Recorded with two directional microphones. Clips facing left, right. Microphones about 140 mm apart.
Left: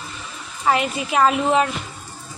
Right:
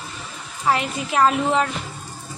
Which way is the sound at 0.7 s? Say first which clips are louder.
Left 2 dB; 5° left (ahead or behind).